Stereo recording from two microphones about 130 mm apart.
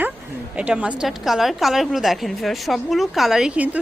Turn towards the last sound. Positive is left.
turn(degrees=-10)  # may be behind; listen again after turning